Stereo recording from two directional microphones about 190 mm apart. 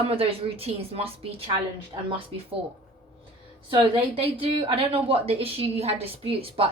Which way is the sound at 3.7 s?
25° right (ahead or behind).